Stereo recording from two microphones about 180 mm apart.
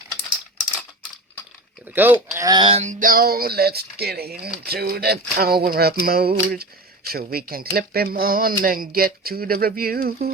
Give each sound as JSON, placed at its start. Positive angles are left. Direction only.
{"t": 1.9, "sound": "speech", "side_deg": -10}
{"t": 3.0, "sound": "speech", "side_deg": -50}